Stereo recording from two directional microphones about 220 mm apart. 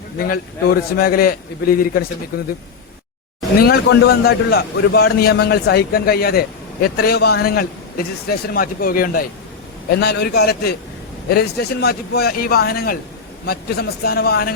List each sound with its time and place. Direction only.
0.2 s a man's voice: 45° left (ahead or behind)
3.6 s a man's voice: 45° left (ahead or behind)